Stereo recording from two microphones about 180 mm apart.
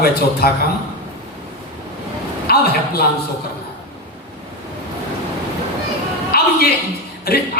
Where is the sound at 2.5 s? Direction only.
60° left (ahead or behind).